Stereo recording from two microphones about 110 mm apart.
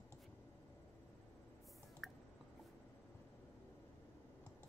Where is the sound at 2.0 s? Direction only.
Centre (ahead or behind).